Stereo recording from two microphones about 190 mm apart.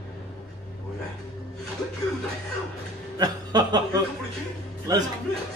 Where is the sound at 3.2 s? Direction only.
20° right (ahead or behind).